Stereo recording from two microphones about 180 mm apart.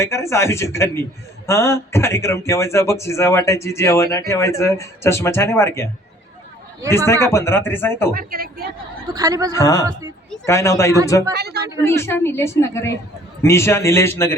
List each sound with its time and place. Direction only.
0.0 s a man's voice: 15° left (ahead or behind)
6.9 s a man's voice: 15° left (ahead or behind)
8.1 s a woman's voice: 55° right (ahead or behind)
9.1 s speech: 20° right (ahead or behind)
9.5 s a man's voice: 20° left (ahead or behind)
11.3 s a woman's voice: 65° right (ahead or behind)
11.9 s a man's voice: 15° left (ahead or behind)